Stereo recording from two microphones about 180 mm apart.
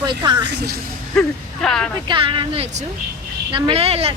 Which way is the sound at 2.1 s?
30° right (ahead or behind).